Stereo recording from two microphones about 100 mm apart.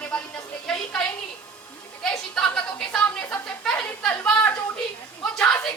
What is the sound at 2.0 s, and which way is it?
A woman's voice, 5° left (ahead or behind).